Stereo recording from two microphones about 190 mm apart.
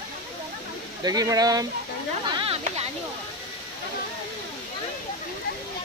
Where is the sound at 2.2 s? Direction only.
25° right (ahead or behind).